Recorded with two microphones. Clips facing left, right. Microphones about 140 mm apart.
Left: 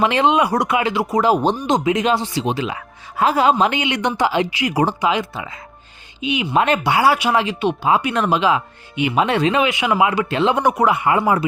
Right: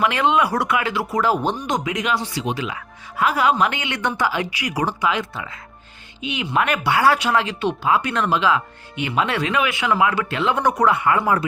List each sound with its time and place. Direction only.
0.0 s speech: 25° left (ahead or behind)
10.6 s speech: 10° left (ahead or behind)